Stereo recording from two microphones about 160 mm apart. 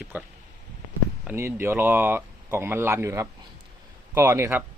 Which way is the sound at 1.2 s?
15° right (ahead or behind).